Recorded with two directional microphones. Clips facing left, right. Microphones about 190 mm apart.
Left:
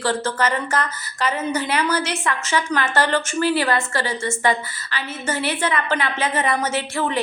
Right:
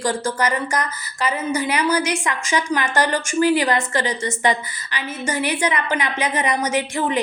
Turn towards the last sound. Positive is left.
turn(degrees=-15)  # may be behind; listen again after turning